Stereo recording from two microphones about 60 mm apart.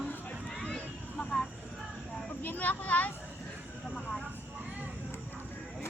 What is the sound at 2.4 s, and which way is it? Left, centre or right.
Speech, left.